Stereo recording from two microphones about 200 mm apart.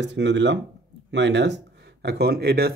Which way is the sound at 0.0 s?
60° right (ahead or behind).